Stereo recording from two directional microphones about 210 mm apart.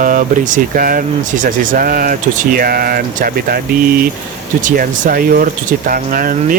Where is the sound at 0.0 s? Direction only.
40° right (ahead or behind).